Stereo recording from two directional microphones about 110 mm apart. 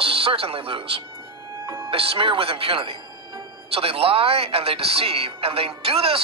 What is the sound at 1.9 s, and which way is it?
Speech, 55° right (ahead or behind).